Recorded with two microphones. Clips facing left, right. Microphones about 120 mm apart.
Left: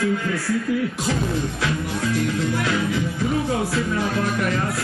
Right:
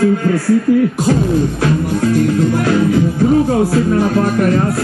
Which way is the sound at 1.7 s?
45° right (ahead or behind).